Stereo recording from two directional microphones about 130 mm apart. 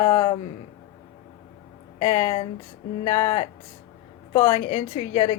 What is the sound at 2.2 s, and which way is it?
A woman's voice, 45° left (ahead or behind).